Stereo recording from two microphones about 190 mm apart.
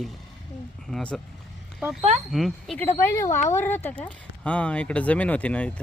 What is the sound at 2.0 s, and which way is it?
Speech, 35° right (ahead or behind).